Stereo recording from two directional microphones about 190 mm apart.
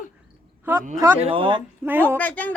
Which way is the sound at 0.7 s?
10° right (ahead or behind).